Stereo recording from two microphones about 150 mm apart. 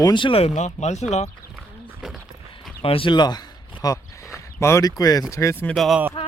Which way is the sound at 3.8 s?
25° left (ahead or behind).